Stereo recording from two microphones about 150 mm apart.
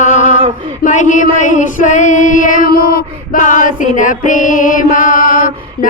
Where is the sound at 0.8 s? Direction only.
55° left (ahead or behind).